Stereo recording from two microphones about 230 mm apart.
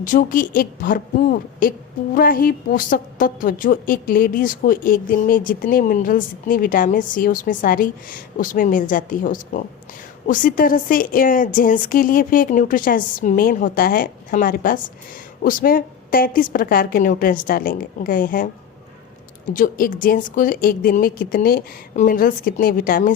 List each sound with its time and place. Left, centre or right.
0.0 s a woman's voice: left
19.5 s a woman's voice: left